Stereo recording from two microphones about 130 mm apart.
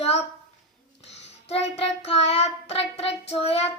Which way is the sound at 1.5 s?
50° left (ahead or behind).